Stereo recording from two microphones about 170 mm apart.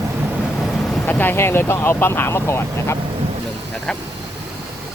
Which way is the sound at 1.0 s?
10° left (ahead or behind).